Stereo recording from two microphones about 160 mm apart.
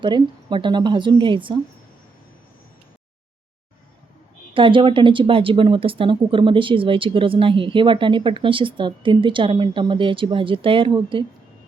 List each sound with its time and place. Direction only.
0.0 s a woman's voice: 30° right (ahead or behind)
4.5 s speech: 30° right (ahead or behind)